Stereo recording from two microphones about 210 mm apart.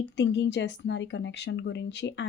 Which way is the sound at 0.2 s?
55° left (ahead or behind).